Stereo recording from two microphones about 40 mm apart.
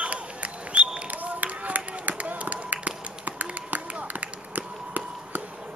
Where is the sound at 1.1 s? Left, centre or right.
Right.